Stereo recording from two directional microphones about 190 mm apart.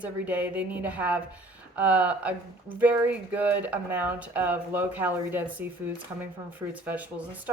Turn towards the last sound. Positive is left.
turn(degrees=-10)  # may be behind; listen again after turning